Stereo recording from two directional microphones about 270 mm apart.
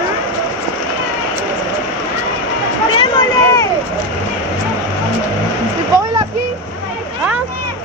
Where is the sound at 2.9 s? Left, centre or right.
Centre.